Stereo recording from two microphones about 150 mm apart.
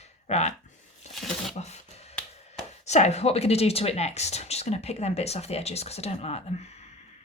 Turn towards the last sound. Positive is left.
turn(degrees=50)  # may be behind; listen again after turning